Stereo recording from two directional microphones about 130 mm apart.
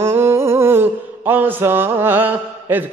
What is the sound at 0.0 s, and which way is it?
Mantra, 20° right (ahead or behind).